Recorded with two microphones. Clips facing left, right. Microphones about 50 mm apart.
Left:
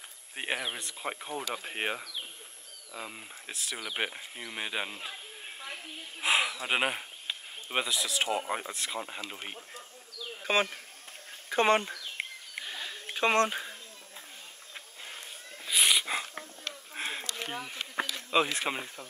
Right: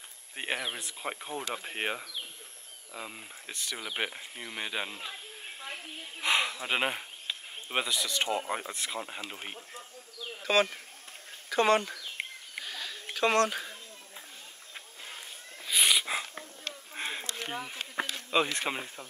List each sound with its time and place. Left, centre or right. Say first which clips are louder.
0.4 s speech: even; centre
10.4 s speech: right 2 dB; centre
11.9 s bird: left 1 dB; centre
12.6 s a sound: even; centre
15.6 s a sound: even; centre
17.5 s speech: even; centre